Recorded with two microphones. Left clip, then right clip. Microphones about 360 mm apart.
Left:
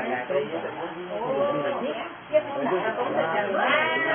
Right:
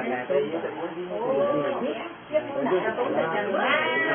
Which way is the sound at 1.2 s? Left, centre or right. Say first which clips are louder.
Right 1 dB; centre.